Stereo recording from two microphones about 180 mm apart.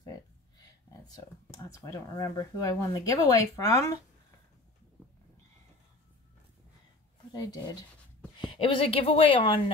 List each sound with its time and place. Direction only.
0.8 s speech: 20° left (ahead or behind)
7.3 s a woman's voice: 20° left (ahead or behind)